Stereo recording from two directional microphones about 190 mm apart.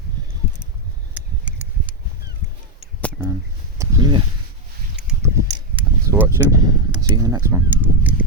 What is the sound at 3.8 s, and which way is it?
Speech, 20° right (ahead or behind).